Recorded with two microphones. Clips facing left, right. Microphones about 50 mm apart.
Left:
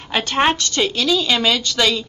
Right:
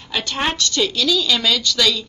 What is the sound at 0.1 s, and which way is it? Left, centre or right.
A woman's voice, left.